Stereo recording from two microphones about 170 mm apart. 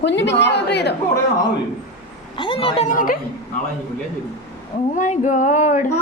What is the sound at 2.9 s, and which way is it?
Speech, 55° left (ahead or behind).